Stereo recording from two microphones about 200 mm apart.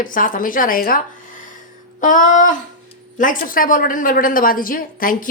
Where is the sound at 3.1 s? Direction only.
45° left (ahead or behind).